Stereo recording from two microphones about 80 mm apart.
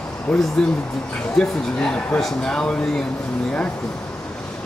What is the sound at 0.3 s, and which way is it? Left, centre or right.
Speech, centre.